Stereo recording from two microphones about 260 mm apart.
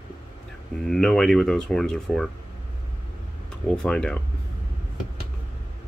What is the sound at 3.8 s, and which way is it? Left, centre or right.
Speech, centre.